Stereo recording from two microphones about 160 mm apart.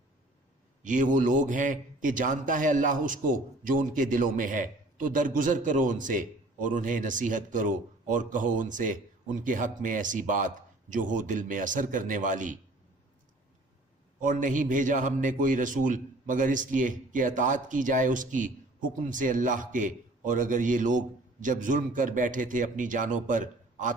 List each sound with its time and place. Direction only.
0.9 s a man's voice: 50° right (ahead or behind)
14.2 s a man's voice: 55° right (ahead or behind)